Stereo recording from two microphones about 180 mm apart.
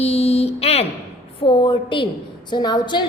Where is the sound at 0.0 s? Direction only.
35° left (ahead or behind).